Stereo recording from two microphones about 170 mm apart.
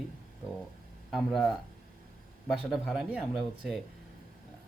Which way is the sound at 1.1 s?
Centre (ahead or behind).